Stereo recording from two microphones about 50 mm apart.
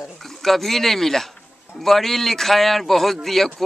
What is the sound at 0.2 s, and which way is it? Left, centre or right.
A man's voice, centre.